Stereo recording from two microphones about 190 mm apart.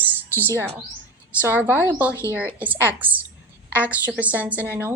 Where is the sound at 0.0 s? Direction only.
10° right (ahead or behind).